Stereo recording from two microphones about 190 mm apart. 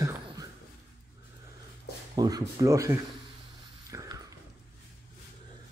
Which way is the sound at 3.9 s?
20° right (ahead or behind).